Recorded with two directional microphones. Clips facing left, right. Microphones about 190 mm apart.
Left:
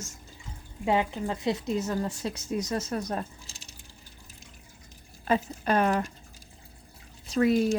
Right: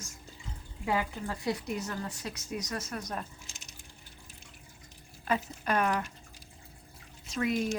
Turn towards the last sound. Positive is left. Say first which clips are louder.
# left 7 dB
turn(degrees=35)  # may be behind; listen again after turning